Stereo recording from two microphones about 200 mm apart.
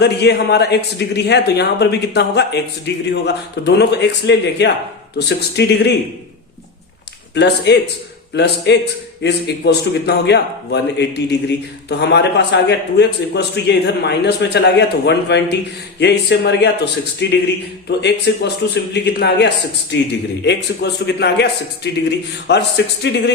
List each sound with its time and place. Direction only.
0.0 s a man's voice: 55° left (ahead or behind)
7.3 s a man's voice: 55° left (ahead or behind)